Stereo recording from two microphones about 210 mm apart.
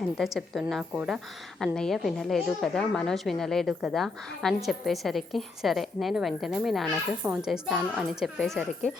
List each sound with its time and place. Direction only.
0.2 s a woman's voice: centre (ahead or behind)